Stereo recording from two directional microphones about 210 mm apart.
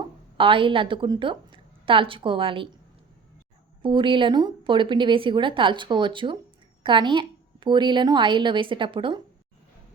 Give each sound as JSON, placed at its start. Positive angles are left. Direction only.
{"t": 0.3, "sound": "speech", "side_deg": -25}
{"t": 3.8, "sound": "speech", "side_deg": -25}